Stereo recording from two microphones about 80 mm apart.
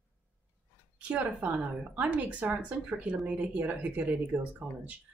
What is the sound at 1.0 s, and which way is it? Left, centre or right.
A woman's voice, centre.